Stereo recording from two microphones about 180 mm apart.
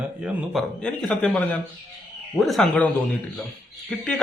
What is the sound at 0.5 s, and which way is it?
Speech, 5° left (ahead or behind).